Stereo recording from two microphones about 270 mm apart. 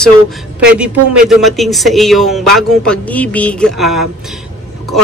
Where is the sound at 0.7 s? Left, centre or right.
Centre.